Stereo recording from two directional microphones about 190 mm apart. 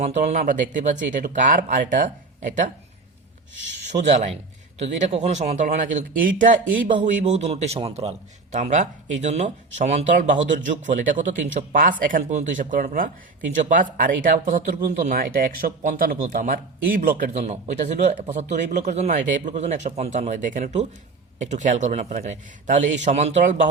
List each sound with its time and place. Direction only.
0.0 s speech: 35° right (ahead or behind)